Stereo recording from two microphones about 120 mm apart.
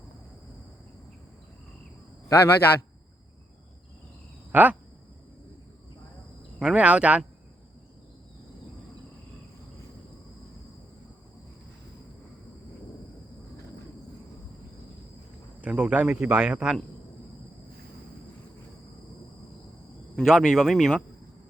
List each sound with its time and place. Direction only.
2.3 s a man's voice: 20° left (ahead or behind)
4.5 s speech: 15° right (ahead or behind)
6.6 s speech: 10° right (ahead or behind)
15.6 s speech: 10° right (ahead or behind)
20.1 s a man's voice: 5° right (ahead or behind)